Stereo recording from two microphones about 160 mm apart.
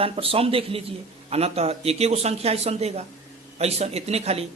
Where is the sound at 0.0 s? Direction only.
35° right (ahead or behind).